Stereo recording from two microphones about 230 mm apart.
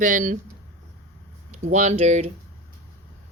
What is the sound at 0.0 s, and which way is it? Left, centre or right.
Speech, right.